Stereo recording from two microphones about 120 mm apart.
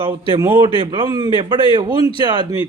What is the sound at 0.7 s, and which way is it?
Speech, 40° right (ahead or behind).